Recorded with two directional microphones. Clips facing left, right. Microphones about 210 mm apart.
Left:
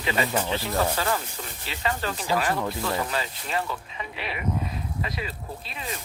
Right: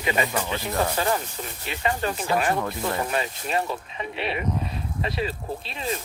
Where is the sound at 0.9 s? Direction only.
25° right (ahead or behind).